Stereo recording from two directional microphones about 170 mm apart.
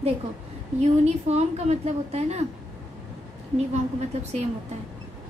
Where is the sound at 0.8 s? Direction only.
40° right (ahead or behind).